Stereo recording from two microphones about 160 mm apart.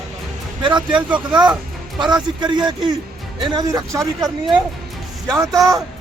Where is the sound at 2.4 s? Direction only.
25° right (ahead or behind).